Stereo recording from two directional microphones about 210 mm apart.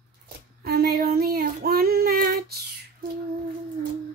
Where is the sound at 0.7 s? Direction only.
45° right (ahead or behind).